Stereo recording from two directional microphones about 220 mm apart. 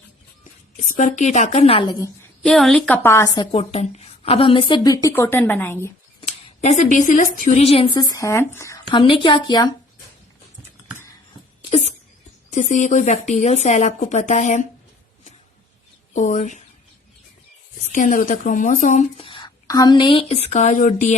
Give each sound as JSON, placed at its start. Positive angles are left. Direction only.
{"t": 0.8, "sound": "a woman's voice", "side_deg": 35}
{"t": 2.4, "sound": "a woman's voice", "side_deg": 5}
{"t": 6.1, "sound": "speech", "side_deg": 30}
{"t": 12.5, "sound": "a woman's voice", "side_deg": 35}
{"t": 16.1, "sound": "a woman's voice", "side_deg": 35}
{"t": 17.9, "sound": "a woman's voice", "side_deg": 35}